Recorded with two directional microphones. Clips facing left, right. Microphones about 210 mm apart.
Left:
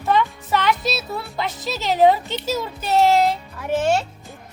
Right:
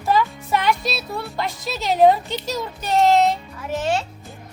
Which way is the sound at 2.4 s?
5° left (ahead or behind).